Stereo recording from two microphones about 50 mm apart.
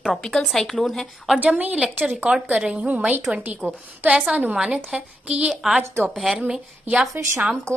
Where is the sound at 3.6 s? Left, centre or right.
Centre.